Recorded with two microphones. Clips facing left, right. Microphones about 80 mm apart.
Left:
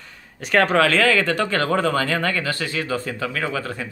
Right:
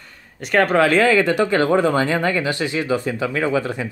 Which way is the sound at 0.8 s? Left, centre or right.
Centre.